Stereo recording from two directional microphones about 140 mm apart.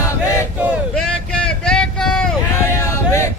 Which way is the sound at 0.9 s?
5° left (ahead or behind).